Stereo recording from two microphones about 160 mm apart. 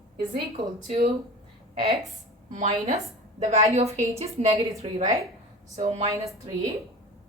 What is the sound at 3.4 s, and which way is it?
A woman's voice, 45° right (ahead or behind).